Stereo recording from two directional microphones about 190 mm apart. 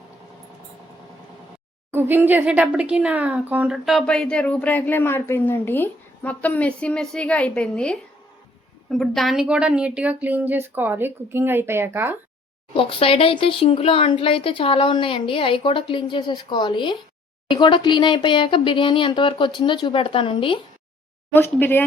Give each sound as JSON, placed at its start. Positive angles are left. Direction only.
{"t": 1.9, "sound": "speech", "side_deg": -10}
{"t": 12.7, "sound": "speech", "side_deg": 30}
{"t": 21.3, "sound": "speech", "side_deg": 10}